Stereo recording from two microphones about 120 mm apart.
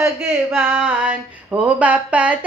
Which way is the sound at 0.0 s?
15° right (ahead or behind).